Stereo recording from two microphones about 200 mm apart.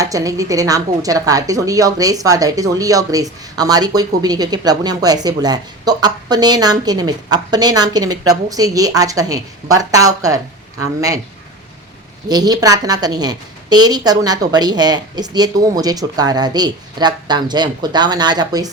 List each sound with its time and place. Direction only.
0.0 s a woman's voice: 15° right (ahead or behind)
12.3 s a woman's voice: 20° right (ahead or behind)